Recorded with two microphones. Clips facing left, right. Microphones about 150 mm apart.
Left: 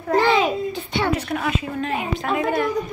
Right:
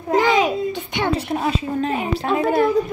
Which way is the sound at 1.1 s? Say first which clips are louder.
Right 2 dB; 30° right (ahead or behind).